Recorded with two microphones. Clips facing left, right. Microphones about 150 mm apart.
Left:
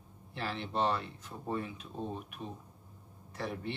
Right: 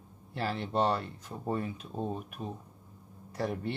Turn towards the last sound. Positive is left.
turn(degrees=-40)  # may be behind; listen again after turning